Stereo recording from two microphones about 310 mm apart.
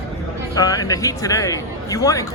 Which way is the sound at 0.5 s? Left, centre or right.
Centre.